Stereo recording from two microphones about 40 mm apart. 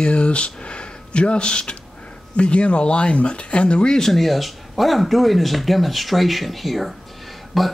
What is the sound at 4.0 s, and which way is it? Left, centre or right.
Speech, centre.